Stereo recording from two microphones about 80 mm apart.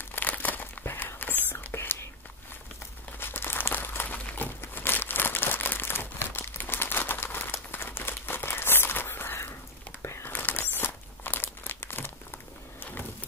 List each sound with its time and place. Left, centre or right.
0.1 s crumpling: left
1.5 s whispering: left
3.2 s crumpling: left